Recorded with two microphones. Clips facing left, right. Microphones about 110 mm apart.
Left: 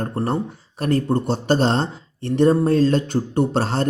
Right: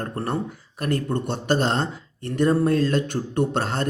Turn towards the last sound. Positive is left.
turn(degrees=30)  # may be behind; listen again after turning